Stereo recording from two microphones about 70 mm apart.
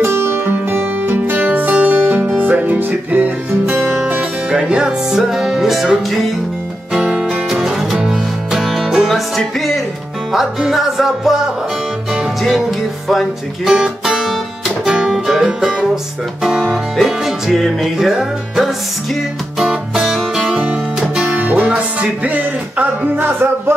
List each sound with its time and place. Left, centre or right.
0.0 s music: right
4.5 s music: centre
10.3 s music: centre
13.7 s music: centre
16.4 s speech: centre
16.9 s music: centre
21.2 s music: right
23.1 s music: right